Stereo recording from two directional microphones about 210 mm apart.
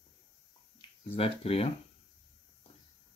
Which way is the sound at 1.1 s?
30° left (ahead or behind).